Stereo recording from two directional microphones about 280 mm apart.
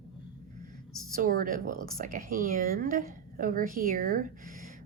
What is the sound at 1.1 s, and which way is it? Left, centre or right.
Speech, right.